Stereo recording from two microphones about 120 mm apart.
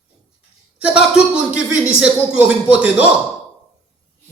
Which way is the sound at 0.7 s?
10° right (ahead or behind).